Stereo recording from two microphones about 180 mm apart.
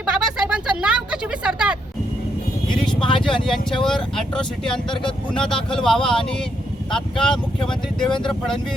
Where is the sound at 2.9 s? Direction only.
25° left (ahead or behind).